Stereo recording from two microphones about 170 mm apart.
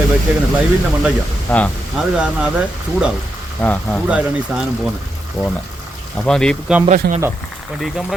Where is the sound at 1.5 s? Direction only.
10° left (ahead or behind).